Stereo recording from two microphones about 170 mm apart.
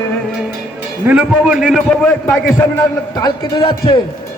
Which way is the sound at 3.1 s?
25° left (ahead or behind).